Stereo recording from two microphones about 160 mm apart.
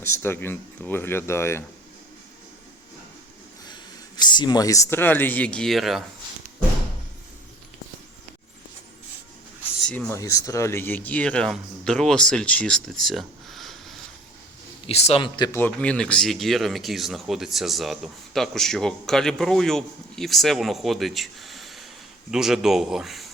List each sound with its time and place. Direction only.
0.0 s speech: 15° left (ahead or behind)
4.2 s speech: 25° left (ahead or behind); by 6.1 s centre (ahead or behind)
9.8 s speech: 5° left (ahead or behind)
10.2 s speech: 20° left (ahead or behind); by 14.0 s centre (ahead or behind)
14.8 s a man's voice: 40° left (ahead or behind)
15.5 s speech: 10° left (ahead or behind)